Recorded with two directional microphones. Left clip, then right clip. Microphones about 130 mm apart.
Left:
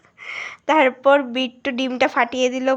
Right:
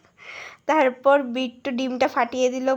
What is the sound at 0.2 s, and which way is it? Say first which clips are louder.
A woman's voice: left 8 dB; 15° left (ahead or behind).